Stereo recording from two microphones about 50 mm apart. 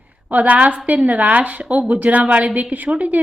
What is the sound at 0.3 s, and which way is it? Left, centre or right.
A woman's voice, right.